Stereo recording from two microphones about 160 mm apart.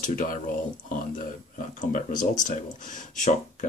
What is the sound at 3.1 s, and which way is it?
Speech, 50° left (ahead or behind).